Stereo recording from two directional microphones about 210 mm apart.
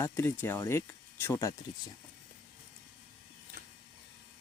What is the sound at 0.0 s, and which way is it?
Speech, 10° left (ahead or behind).